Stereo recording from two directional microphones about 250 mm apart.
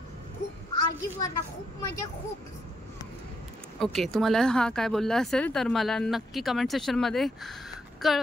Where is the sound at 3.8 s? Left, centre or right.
Centre.